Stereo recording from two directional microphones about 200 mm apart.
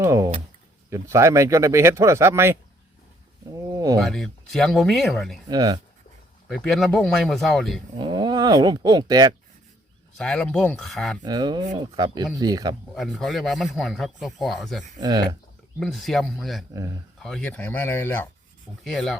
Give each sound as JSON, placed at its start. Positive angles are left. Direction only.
{"t": 0.0, "sound": "a sound", "side_deg": -15}
{"t": 0.9, "sound": "speech", "side_deg": -15}
{"t": 4.0, "sound": "speech", "side_deg": 0}
{"t": 5.5, "sound": "speech", "side_deg": -20}
{"t": 6.5, "sound": "speech", "side_deg": 0}
{"t": 7.9, "sound": "speech", "side_deg": -20}
{"t": 10.2, "sound": "speech", "side_deg": 5}
{"t": 11.2, "sound": "speech", "side_deg": -20}
{"t": 12.9, "sound": "speech", "side_deg": 0}
{"t": 15.0, "sound": "speech", "side_deg": -20}
{"t": 15.8, "sound": "speech", "side_deg": 0}